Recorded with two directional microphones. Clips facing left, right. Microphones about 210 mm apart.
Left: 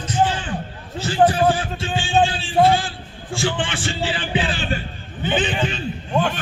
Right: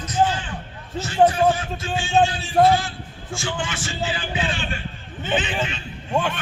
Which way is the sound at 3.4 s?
30° left (ahead or behind).